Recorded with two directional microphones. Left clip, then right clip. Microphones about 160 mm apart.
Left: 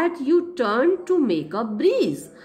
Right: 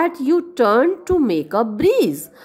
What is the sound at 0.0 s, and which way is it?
A woman's voice, 45° right (ahead or behind).